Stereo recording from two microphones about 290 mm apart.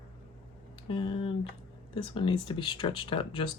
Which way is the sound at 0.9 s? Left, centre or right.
Centre.